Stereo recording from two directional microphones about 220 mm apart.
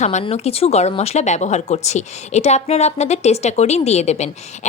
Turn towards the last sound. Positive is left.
turn(degrees=30)  # may be behind; listen again after turning